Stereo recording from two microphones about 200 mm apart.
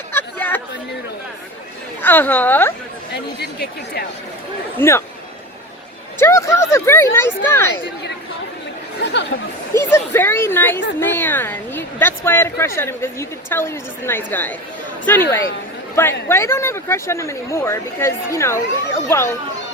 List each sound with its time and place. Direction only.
0.1 s chatter: 10° left (ahead or behind)
2.0 s speech: 10° left (ahead or behind)
3.1 s speech: 50° left (ahead or behind)
4.8 s speech: 10° left (ahead or behind)
6.1 s speech: 15° left (ahead or behind)
9.7 s speech: 10° left (ahead or behind)